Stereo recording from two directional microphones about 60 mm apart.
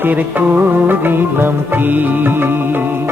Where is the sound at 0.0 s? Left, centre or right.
Right.